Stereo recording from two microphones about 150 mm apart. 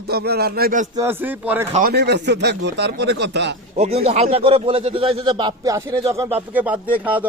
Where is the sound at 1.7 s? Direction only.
80° right.